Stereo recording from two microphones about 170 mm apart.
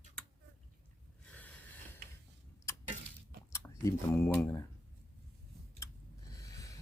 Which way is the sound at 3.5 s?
15° left (ahead or behind).